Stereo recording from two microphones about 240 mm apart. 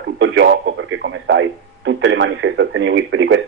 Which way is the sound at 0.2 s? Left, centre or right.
Right.